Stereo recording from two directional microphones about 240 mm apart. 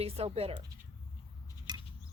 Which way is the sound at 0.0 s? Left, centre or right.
Right.